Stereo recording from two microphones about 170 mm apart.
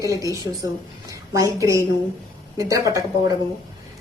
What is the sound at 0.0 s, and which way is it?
A woman's voice, 20° right (ahead or behind).